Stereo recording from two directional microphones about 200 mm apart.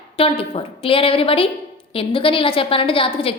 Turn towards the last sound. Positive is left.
turn(degrees=25)  # may be behind; listen again after turning